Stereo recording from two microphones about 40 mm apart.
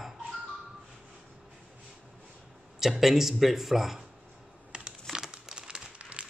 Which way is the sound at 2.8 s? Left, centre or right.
Centre.